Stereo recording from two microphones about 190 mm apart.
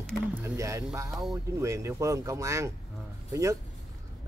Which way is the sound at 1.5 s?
15° right (ahead or behind).